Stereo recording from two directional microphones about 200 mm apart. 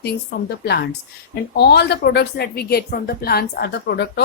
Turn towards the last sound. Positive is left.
turn(degrees=55)  # may be behind; listen again after turning